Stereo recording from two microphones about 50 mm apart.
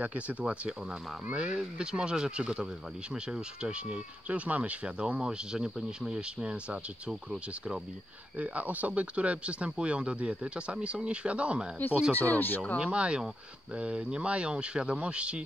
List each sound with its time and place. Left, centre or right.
0.0 s speech: right; by 7.8 s centre
8.4 s speech: right
12.1 s speech: left
12.8 s speech: right